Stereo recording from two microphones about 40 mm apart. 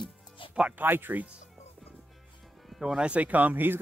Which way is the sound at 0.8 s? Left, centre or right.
Right.